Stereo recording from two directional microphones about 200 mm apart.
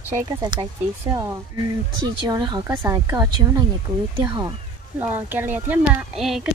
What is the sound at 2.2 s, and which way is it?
A woman's voice, 20° right (ahead or behind).